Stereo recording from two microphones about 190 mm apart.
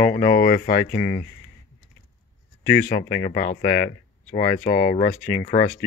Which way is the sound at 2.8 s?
50° left (ahead or behind).